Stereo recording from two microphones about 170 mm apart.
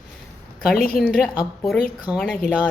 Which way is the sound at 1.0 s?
Centre (ahead or behind).